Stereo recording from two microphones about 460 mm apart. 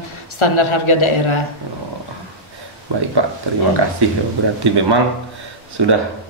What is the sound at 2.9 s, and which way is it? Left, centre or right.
Speech, right.